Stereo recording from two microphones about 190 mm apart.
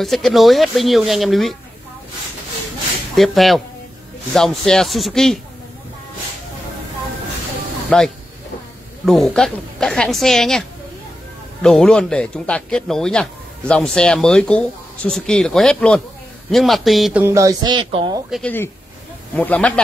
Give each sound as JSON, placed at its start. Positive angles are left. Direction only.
{"t": 0.0, "sound": "a man's voice", "side_deg": 0}
{"t": 3.2, "sound": "a man's voice", "side_deg": 0}
{"t": 7.9, "sound": "a man's voice", "side_deg": 5}
{"t": 11.6, "sound": "a man's voice", "side_deg": 5}
{"t": 17.2, "sound": "speech", "side_deg": -15}
{"t": 18.3, "sound": "speech", "side_deg": 10}